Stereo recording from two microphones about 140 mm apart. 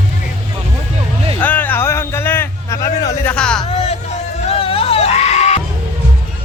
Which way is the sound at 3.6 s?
45° left (ahead or behind).